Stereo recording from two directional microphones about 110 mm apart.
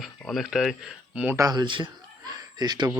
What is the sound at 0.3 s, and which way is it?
Speech, 5° right (ahead or behind).